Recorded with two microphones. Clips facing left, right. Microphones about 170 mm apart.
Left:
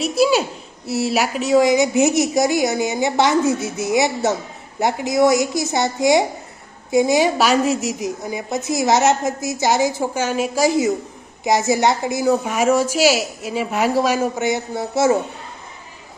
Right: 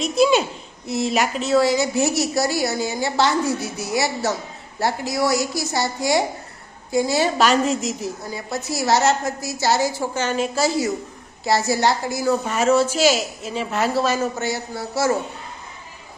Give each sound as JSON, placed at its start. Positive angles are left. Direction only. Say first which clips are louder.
{"t": 0.0, "sound": "a woman's voice", "louder": "left 1 dB", "side_deg": 5}